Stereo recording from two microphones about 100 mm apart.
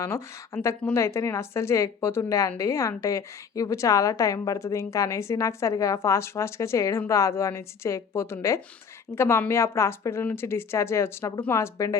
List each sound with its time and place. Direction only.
0.0 s a woman's voice: 30° left (ahead or behind)